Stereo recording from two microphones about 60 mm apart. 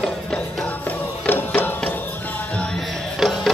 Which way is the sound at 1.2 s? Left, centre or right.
Left.